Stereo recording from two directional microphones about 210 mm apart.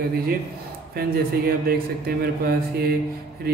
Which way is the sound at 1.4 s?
45° right (ahead or behind).